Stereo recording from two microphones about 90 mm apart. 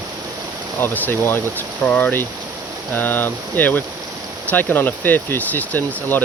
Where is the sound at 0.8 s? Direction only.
25° left (ahead or behind).